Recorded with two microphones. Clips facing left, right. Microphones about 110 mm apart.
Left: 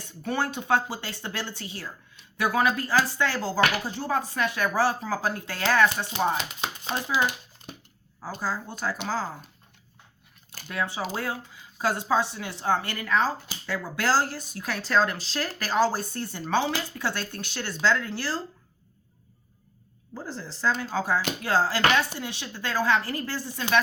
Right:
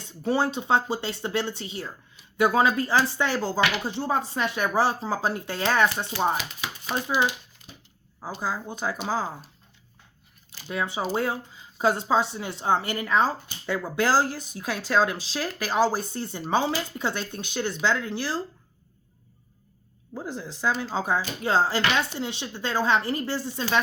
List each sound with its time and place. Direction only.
0.0 s speech: 25° right (ahead or behind)
6.1 s chopping: 25° left (ahead or behind)
8.4 s speech: 15° right (ahead or behind)
10.7 s speech: 20° right (ahead or behind)
20.1 s speech: 15° right (ahead or behind)